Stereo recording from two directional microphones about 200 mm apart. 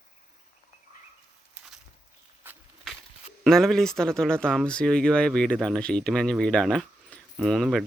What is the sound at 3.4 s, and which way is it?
Speech, centre (ahead or behind).